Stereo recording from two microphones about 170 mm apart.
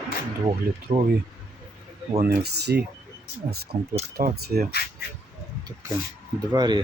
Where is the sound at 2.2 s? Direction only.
70° right (ahead or behind).